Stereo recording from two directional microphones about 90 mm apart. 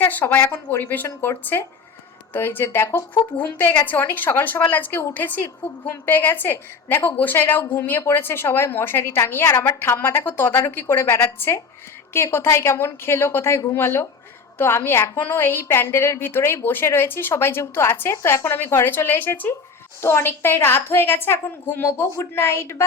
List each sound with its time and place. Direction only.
0.0 s a woman's voice: 20° left (ahead or behind)